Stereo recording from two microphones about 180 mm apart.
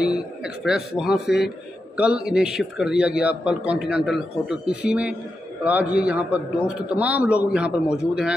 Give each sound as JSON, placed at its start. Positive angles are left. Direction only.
{"t": 0.0, "sound": "a man's voice", "side_deg": -5}